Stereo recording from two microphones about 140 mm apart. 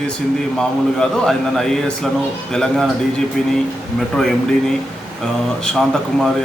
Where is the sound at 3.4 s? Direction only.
5° left (ahead or behind).